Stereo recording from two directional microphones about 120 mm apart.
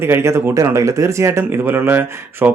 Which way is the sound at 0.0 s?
20° right (ahead or behind).